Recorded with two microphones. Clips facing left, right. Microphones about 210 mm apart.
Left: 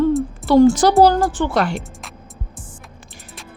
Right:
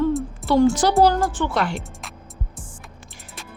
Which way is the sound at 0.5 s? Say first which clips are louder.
Left 5 dB; 40° left (ahead or behind).